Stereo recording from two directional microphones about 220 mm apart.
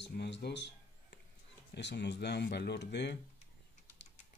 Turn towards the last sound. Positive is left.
turn(degrees=50)  # may be behind; listen again after turning